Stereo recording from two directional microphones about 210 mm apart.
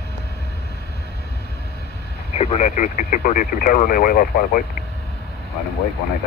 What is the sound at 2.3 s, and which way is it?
Speech, 30° left (ahead or behind).